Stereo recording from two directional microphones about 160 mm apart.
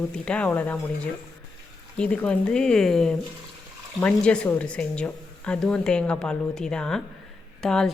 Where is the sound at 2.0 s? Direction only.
5° left (ahead or behind).